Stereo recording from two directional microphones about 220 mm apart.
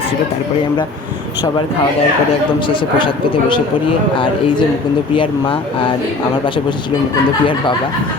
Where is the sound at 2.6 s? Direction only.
20° left (ahead or behind).